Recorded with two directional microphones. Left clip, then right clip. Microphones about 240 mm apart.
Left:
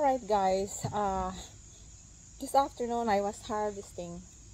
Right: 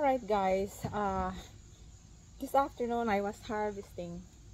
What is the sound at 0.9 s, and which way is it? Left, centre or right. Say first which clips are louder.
Speech: left 2 dB; centre.